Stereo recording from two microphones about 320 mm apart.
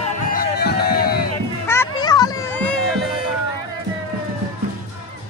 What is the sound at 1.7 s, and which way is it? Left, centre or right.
Music, centre.